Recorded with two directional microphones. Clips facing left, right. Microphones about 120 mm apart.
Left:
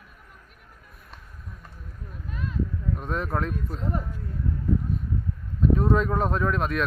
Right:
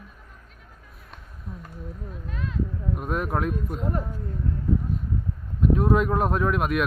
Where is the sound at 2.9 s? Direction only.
10° right (ahead or behind).